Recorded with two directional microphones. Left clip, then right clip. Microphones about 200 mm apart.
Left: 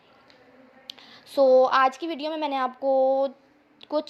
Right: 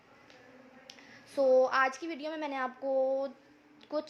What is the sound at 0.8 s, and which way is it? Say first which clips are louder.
A woman's voice: left 11 dB; 30° left (ahead or behind).